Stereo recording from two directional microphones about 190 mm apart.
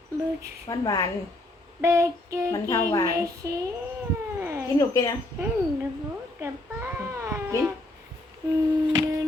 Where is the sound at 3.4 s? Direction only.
15° right (ahead or behind).